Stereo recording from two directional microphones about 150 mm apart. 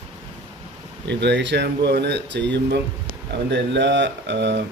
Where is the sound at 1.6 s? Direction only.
90° right.